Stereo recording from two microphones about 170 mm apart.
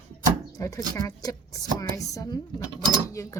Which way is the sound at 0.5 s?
20° left (ahead or behind).